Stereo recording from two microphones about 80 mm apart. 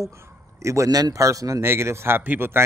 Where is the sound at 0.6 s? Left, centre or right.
Right.